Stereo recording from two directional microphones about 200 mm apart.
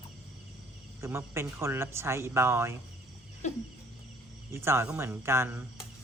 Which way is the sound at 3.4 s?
35° left (ahead or behind).